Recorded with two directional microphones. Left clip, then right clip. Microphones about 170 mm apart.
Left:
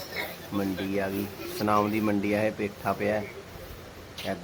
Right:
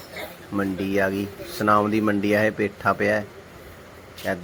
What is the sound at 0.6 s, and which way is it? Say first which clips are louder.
Speech: right 6 dB; 15° right (ahead or behind).